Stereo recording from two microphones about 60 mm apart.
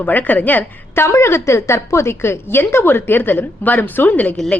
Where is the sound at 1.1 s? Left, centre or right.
Left.